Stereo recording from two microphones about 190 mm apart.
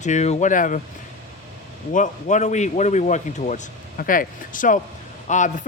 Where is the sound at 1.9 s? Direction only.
40° left (ahead or behind).